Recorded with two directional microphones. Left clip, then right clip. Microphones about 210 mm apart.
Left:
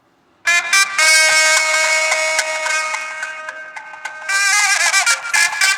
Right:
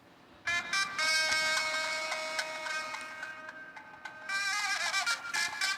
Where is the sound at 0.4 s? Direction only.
55° left (ahead or behind).